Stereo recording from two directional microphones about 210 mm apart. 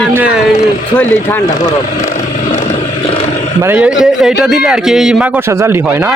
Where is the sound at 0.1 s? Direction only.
5° right (ahead or behind).